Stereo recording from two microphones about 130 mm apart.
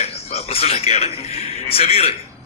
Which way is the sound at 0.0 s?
55° left (ahead or behind).